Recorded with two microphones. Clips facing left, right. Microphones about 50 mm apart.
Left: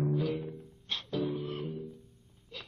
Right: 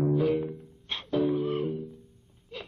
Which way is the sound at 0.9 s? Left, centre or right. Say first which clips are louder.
Right 7 dB; right.